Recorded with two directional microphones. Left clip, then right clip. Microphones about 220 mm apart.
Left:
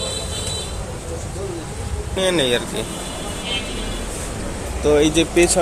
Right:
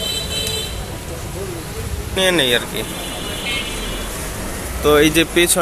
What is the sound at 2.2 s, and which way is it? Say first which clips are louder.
Speech: right 3 dB; centre (ahead or behind).